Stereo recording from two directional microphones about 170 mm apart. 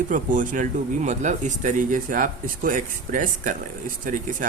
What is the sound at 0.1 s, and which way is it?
Speech, 50° right (ahead or behind).